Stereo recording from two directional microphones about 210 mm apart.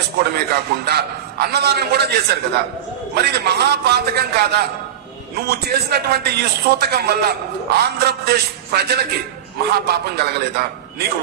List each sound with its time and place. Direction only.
0.2 s a man's voice: 50° right (ahead or behind)